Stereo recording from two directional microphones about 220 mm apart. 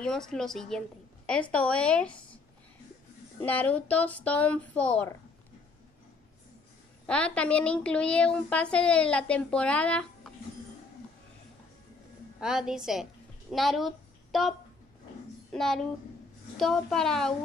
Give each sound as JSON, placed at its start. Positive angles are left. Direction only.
{"t": 0.0, "sound": "a woman's voice", "side_deg": 0}
{"t": 3.4, "sound": "speech", "side_deg": 5}
{"t": 7.1, "sound": "a woman's voice", "side_deg": 5}
{"t": 12.4, "sound": "a woman's voice", "side_deg": -5}
{"t": 15.5, "sound": "a woman's voice", "side_deg": 0}